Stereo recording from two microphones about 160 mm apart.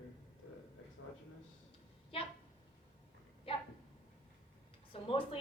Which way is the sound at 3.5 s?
35° left (ahead or behind).